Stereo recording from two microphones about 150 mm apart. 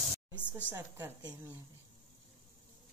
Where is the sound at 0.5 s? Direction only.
10° right (ahead or behind).